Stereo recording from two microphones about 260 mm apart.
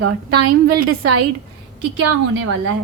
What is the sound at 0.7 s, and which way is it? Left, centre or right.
Speech, right.